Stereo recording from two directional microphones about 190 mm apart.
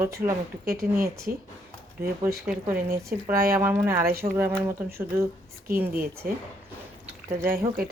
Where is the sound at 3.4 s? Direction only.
10° right (ahead or behind).